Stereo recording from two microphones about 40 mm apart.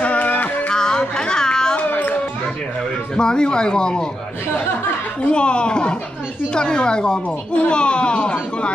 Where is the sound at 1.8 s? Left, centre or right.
Left.